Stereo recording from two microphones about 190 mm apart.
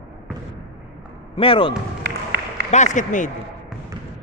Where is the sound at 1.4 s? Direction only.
30° left (ahead or behind).